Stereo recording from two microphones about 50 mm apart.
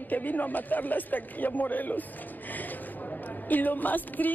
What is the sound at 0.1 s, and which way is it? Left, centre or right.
Speech, left.